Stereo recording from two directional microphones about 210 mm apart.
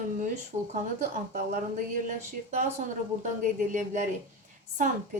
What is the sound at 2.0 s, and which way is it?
Speech, 35° right (ahead or behind).